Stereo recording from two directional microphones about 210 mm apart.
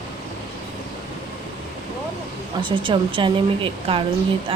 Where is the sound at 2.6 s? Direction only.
25° right (ahead or behind).